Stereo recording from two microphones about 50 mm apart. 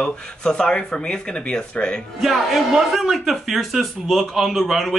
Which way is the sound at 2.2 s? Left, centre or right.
Centre.